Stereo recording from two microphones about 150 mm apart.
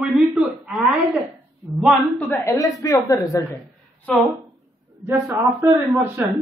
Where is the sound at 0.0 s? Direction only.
5° right (ahead or behind).